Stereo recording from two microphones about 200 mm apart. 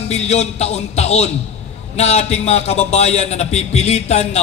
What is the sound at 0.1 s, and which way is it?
A man's voice, 35° left (ahead or behind).